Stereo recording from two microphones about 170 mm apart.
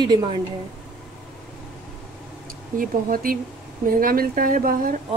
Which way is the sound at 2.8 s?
55° right (ahead or behind).